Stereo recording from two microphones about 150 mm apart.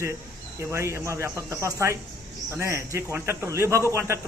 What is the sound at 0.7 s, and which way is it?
A man's voice, 15° right (ahead or behind).